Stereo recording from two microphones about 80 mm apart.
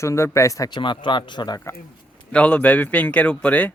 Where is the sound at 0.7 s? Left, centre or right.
Left.